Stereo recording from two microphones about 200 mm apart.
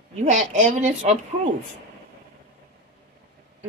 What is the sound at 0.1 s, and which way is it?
Speech, 35° right (ahead or behind).